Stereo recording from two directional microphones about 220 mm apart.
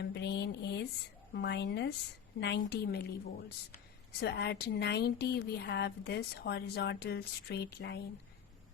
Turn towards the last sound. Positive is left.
turn(degrees=50)  # may be behind; listen again after turning